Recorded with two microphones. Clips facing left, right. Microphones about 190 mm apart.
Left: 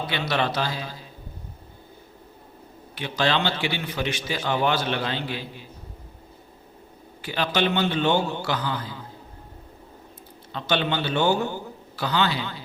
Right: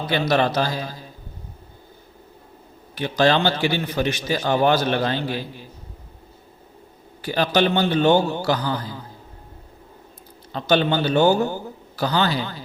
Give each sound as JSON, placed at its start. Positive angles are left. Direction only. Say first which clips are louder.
{"t": 0.1, "sound": "a man's voice", "louder": "right 8 dB", "side_deg": -40}
{"t": 2.9, "sound": "a man's voice", "louder": "right 6 dB", "side_deg": -40}
{"t": 7.2, "sound": "a man's voice", "louder": "right 5 dB", "side_deg": -40}
{"t": 10.5, "sound": "a man's voice", "louder": "right 6 dB", "side_deg": -40}